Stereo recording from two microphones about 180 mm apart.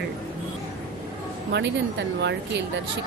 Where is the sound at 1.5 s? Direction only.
75° right (ahead or behind).